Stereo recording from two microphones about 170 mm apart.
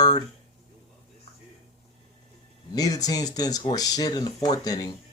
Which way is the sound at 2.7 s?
20° left (ahead or behind).